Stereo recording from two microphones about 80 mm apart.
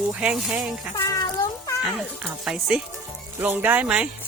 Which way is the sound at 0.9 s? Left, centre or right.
Left.